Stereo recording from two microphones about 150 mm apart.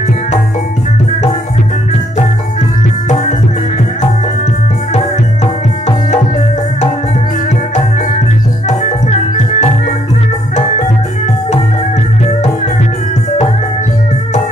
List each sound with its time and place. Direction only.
4.9 s music: 50° left (ahead or behind)
8.6 s music: 50° left (ahead or behind)